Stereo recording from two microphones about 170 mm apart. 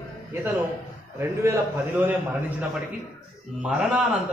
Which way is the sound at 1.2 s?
15° right (ahead or behind).